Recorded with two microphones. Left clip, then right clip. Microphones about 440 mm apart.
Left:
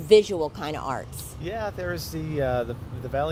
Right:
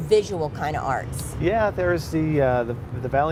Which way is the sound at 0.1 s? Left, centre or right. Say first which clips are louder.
Left 2 dB; left.